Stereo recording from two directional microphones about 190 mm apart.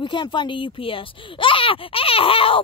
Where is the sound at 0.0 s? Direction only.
25° left (ahead or behind).